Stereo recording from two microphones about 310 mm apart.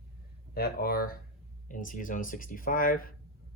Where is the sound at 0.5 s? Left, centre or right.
Left.